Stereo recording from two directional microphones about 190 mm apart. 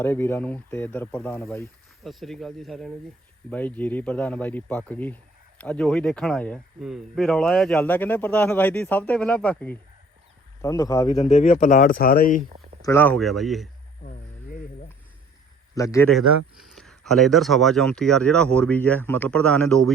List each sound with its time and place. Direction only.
0.0 s speech: 10° left (ahead or behind)
2.0 s a man's voice: centre (ahead or behind); by 11.2 s 20° left (ahead or behind)
11.2 s speech: 40° left (ahead or behind)
12.8 s a man's voice: 10° left (ahead or behind)
14.0 s a sound: 40° left (ahead or behind)
15.7 s a man's voice: 15° left (ahead or behind)
16.1 s a man's voice: centre (ahead or behind)